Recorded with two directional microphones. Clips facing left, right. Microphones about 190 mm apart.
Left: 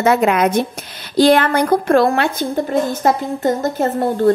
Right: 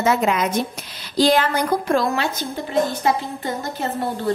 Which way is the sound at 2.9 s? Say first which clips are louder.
Left 5 dB; 45° left (ahead or behind).